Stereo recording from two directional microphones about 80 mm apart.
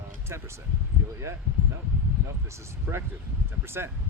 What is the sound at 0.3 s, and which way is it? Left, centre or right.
Speech, right.